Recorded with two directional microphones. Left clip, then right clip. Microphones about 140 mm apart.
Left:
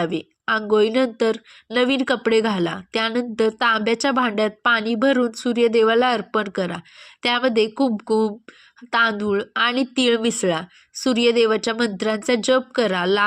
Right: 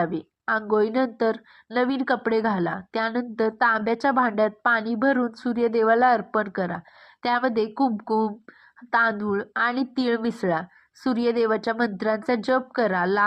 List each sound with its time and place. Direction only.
0.0 s speech: 50° left (ahead or behind)